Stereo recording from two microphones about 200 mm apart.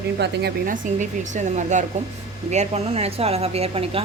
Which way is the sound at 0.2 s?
50° right (ahead or behind).